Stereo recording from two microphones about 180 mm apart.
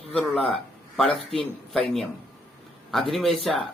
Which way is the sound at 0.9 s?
Centre (ahead or behind).